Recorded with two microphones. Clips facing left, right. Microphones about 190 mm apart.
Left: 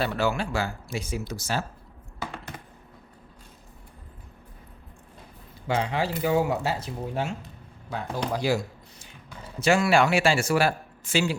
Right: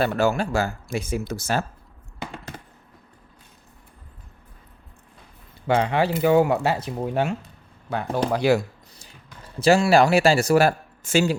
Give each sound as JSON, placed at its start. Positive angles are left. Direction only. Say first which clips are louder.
{"t": 0.0, "sound": "speech", "louder": "right 5 dB", "side_deg": -45}
{"t": 5.6, "sound": "speech", "louder": "right 6 dB", "side_deg": -60}
{"t": 9.6, "sound": "speech", "louder": "right 4 dB", "side_deg": -35}